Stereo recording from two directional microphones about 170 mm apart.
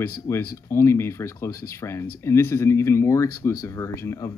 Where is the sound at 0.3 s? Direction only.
15° left (ahead or behind).